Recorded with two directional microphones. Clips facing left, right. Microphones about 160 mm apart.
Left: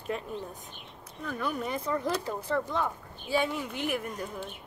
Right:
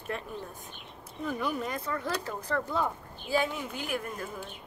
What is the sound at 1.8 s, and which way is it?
Speech, 20° left (ahead or behind).